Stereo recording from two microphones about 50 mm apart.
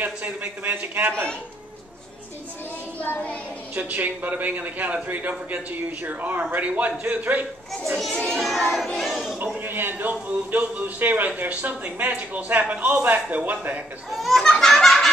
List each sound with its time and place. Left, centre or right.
0.0 s speech: right
3.8 s speech: right
8.3 s a sound: centre
9.6 s speech: right
14.1 s speech: centre
14.4 s a sound: centre